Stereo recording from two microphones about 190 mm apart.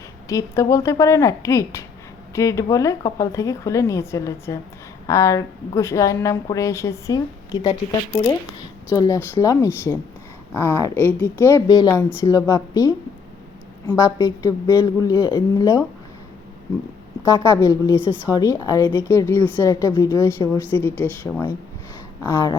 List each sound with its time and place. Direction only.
0.3 s a woman's voice: 15° left (ahead or behind)
8.9 s a woman's voice: 15° left (ahead or behind)
17.2 s a woman's voice: 15° left (ahead or behind)
17.9 s a woman's voice: 10° right (ahead or behind)
18.3 s a woman's voice: 20° left (ahead or behind)